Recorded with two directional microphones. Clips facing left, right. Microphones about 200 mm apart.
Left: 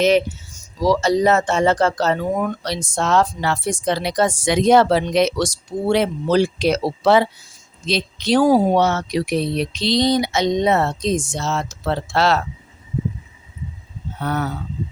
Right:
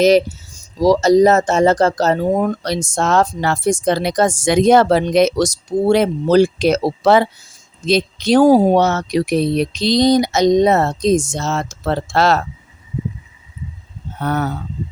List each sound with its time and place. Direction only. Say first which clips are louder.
0.0 s speech: right 4 dB; 40° right (ahead or behind)
14.2 s speech: right 3 dB; 45° right (ahead or behind)